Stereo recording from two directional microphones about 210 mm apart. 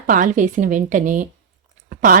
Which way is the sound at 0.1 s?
40° right (ahead or behind).